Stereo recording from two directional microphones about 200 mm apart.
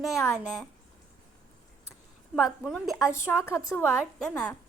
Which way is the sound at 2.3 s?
Centre (ahead or behind).